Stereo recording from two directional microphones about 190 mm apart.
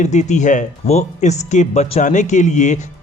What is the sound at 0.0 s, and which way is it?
Speech, 40° left (ahead or behind).